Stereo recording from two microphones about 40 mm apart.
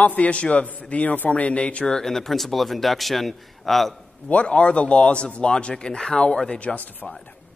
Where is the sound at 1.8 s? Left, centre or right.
Centre.